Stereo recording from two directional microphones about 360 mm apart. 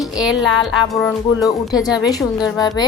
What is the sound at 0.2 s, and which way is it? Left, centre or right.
A woman's voice, centre.